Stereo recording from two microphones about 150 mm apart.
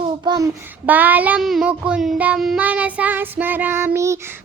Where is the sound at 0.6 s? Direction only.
10° right (ahead or behind).